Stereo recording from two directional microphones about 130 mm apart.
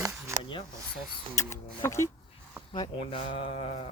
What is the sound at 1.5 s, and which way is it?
Speech, 20° left (ahead or behind).